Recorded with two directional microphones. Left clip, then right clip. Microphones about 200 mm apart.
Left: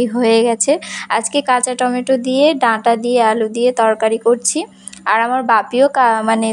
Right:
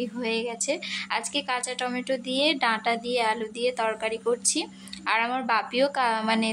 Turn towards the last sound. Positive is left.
turn(degrees=30)  # may be behind; listen again after turning